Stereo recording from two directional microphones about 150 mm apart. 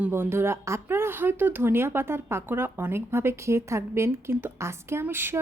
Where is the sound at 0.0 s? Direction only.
15° right (ahead or behind).